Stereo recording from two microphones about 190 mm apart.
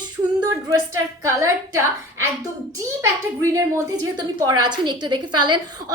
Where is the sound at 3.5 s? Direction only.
20° right (ahead or behind).